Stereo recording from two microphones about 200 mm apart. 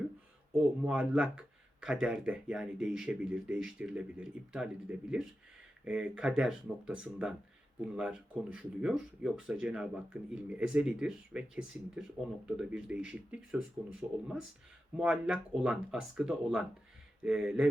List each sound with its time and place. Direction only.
0.5 s speech: 5° right (ahead or behind)
14.9 s speech: 5° right (ahead or behind)